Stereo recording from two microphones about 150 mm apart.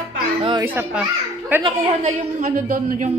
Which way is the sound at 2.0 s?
55° right (ahead or behind).